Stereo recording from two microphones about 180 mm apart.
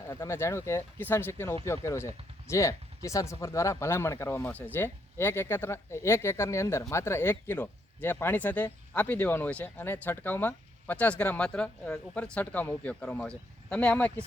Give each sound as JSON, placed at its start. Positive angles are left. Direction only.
{"t": 0.1, "sound": "speech", "side_deg": 15}